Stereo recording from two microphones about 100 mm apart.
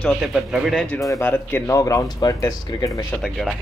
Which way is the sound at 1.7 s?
35° left (ahead or behind).